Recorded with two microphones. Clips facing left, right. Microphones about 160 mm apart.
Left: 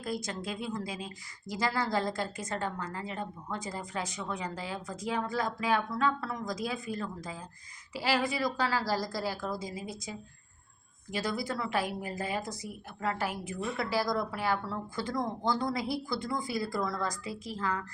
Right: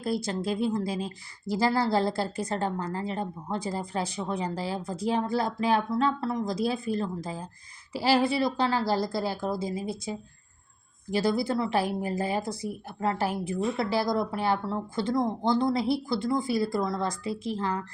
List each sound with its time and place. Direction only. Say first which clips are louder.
0.0 s speech: right 7 dB; 30° right (ahead or behind)